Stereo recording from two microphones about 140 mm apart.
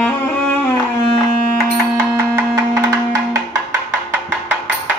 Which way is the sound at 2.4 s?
20° right (ahead or behind).